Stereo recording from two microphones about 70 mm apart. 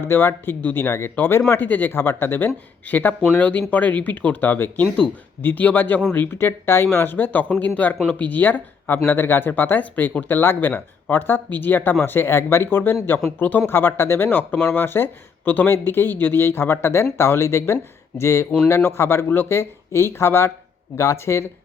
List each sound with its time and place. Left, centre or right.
0.1 s speech: left